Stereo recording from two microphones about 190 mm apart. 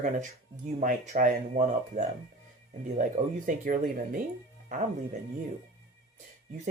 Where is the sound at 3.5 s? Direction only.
45° right (ahead or behind).